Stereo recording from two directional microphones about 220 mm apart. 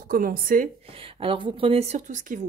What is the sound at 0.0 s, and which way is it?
Speech, 40° right (ahead or behind).